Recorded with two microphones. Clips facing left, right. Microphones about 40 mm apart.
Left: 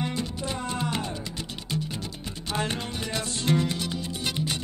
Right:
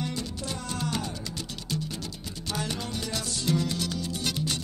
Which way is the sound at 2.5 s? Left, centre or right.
Left.